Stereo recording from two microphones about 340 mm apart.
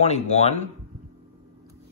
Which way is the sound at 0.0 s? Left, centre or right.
Centre.